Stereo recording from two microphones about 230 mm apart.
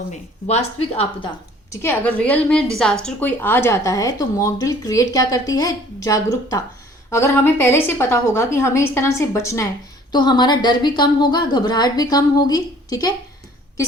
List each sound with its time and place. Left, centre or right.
0.1 s speech: left
1.7 s a woman's voice: centre